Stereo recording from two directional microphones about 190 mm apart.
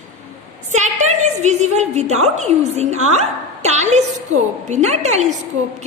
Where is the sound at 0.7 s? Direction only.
40° right (ahead or behind).